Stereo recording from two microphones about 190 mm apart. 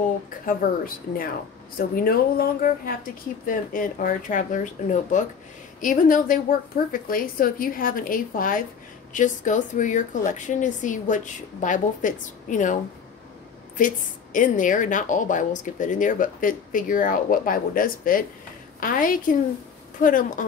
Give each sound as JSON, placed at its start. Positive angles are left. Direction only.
{"t": 0.5, "sound": "a woman's voice", "side_deg": 50}
{"t": 13.7, "sound": "a woman's voice", "side_deg": 45}